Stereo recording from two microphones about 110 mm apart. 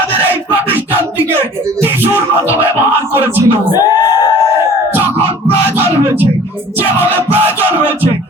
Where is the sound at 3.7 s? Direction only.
35° left (ahead or behind).